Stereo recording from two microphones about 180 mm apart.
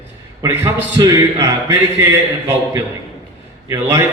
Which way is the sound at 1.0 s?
20° right (ahead or behind).